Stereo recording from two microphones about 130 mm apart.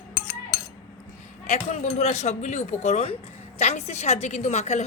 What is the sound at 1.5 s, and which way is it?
A woman's voice, 60° left (ahead or behind).